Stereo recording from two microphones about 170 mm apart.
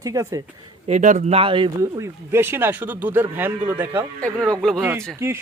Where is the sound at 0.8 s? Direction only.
45° right (ahead or behind).